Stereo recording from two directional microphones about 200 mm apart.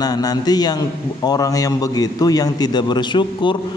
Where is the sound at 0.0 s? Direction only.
20° left (ahead or behind).